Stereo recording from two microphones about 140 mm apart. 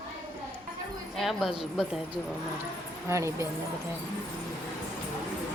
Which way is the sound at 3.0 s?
20° right (ahead or behind).